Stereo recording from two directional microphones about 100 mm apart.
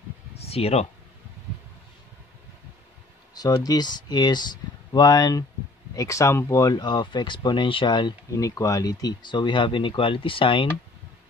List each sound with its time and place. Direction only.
0.4 s speech: 85° left
3.3 s speech: 40° left (ahead or behind)
8.3 s speech: 35° left (ahead or behind); by 10.7 s 60° left (ahead or behind)